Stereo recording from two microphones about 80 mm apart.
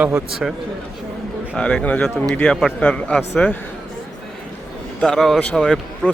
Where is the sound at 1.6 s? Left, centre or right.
Centre.